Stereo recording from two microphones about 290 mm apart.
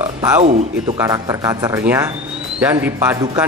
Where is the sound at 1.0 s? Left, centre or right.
Centre.